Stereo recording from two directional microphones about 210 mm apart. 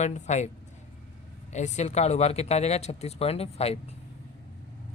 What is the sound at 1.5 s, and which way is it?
A man's voice, 35° left (ahead or behind).